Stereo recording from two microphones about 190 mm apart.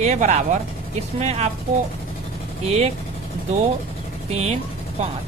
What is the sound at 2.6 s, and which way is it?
Speech, 35° right (ahead or behind).